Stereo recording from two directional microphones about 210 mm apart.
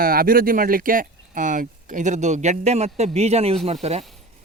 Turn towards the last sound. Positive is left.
turn(degrees=-30)  # may be behind; listen again after turning